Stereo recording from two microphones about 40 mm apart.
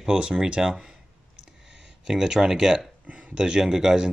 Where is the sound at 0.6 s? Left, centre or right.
Centre.